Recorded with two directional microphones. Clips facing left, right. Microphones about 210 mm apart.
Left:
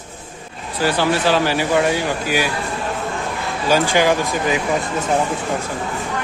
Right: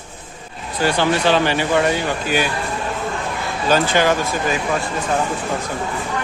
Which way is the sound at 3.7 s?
10° left (ahead or behind).